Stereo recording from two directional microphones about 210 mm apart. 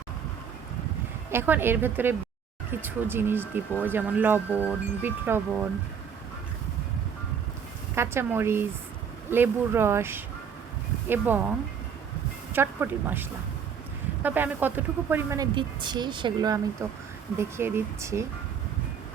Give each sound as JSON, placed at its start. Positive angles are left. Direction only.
{"t": 1.3, "sound": "speech", "side_deg": -10}
{"t": 7.9, "sound": "speech", "side_deg": -10}
{"t": 12.5, "sound": "speech", "side_deg": -10}
{"t": 15.5, "sound": "speech", "side_deg": -20}